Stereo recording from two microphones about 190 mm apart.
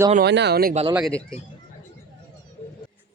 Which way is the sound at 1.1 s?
5° left (ahead or behind).